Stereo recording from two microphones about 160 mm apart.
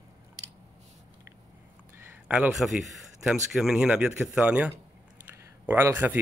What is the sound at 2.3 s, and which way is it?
A man's voice, 5° right (ahead or behind).